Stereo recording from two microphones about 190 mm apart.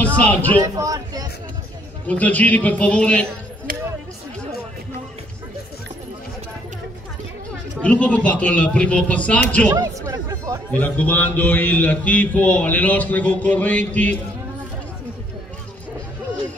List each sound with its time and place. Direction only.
0.0 s speech: 10° left (ahead or behind)
0.7 s speech: 20° right (ahead or behind)
2.0 s a man's voice: 10° left (ahead or behind)
7.8 s a man's voice: 5° left (ahead or behind)
9.7 s speech: 20° right (ahead or behind)
10.7 s a man's voice: 10° left (ahead or behind)